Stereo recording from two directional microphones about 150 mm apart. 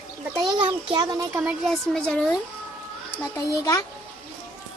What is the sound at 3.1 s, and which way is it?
Speech, 20° left (ahead or behind).